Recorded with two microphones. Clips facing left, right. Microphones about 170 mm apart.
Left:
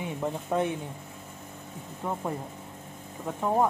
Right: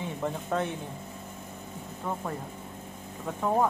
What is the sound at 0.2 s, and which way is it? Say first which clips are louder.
Speech: left 2 dB; 10° left (ahead or behind).